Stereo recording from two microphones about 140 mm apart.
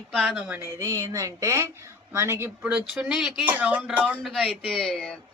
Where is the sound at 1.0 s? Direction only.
20° right (ahead or behind).